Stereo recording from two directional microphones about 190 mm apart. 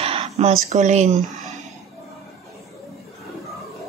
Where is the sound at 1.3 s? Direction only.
40° right (ahead or behind).